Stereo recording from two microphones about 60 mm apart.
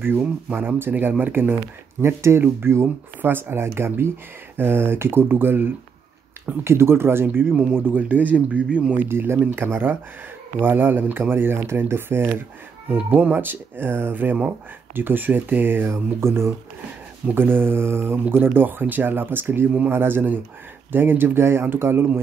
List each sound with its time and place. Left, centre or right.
0.5 s speech: right
3.2 s speech: right
6.6 s speech: right
7.2 s speech: right; by 8.9 s centre
8.9 s speech: right
17.3 s speech: right